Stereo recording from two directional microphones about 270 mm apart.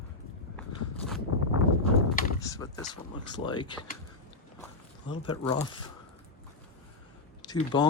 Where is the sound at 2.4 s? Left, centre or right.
Centre.